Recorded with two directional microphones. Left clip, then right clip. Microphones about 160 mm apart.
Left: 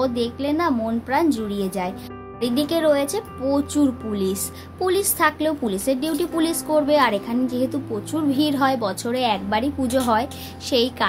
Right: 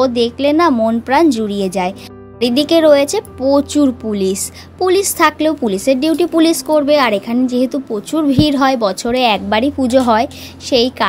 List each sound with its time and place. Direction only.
0.0 s a woman's voice: 45° right (ahead or behind)